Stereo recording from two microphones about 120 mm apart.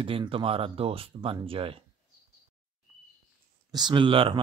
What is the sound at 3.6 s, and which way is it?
Speech, 35° right (ahead or behind).